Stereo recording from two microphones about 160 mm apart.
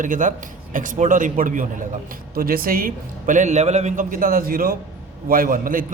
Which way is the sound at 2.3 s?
65° right (ahead or behind).